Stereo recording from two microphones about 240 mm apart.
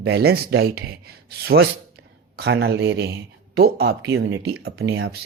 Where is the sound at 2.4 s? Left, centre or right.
Right.